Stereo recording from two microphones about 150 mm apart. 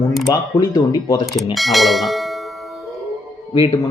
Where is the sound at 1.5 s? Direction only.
Centre (ahead or behind).